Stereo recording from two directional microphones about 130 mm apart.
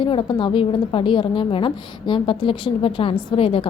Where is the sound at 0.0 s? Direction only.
40° left (ahead or behind).